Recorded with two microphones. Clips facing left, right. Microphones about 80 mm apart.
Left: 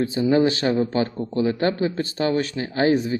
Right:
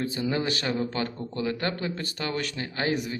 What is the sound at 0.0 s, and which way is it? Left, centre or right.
Speech, left.